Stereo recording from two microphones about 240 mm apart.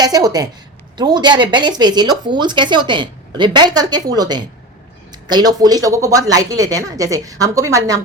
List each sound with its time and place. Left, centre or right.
0.0 s speech: centre